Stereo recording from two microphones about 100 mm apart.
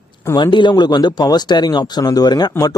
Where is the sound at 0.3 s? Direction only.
50° left (ahead or behind).